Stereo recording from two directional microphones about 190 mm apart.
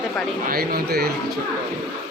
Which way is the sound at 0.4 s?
55° right (ahead or behind).